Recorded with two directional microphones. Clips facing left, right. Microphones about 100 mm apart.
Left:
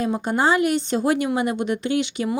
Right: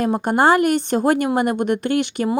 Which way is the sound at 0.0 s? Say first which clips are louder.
Right 4 dB; 55° right (ahead or behind).